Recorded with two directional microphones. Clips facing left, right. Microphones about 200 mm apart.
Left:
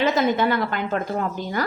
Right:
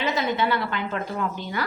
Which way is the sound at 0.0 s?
45° left (ahead or behind).